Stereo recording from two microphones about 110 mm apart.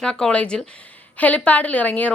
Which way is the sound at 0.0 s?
5° left (ahead or behind).